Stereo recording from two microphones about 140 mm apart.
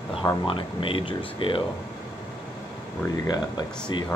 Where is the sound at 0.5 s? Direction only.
40° left (ahead or behind).